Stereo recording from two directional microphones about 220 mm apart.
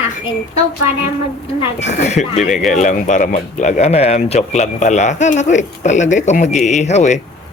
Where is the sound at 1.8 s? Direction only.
30° left (ahead or behind).